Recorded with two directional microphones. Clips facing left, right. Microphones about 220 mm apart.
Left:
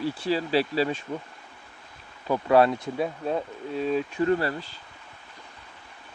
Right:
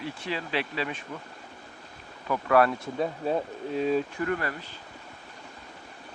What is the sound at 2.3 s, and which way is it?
Speech, 25° left (ahead or behind).